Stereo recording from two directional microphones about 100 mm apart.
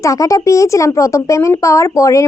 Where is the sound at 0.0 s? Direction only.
35° left (ahead or behind).